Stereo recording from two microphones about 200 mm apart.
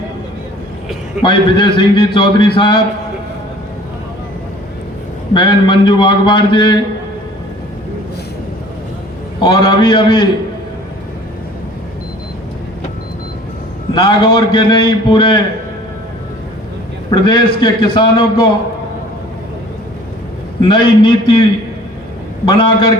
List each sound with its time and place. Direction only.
1.2 s a man's voice: 25° left (ahead or behind)
5.3 s a man's voice: 20° left (ahead or behind)
9.4 s a man's voice: 25° left (ahead or behind)
13.9 s a man's voice: 25° left (ahead or behind)
17.1 s a man's voice: 25° left (ahead or behind)
20.6 s a man's voice: 25° left (ahead or behind)
22.4 s a man's voice: 25° left (ahead or behind)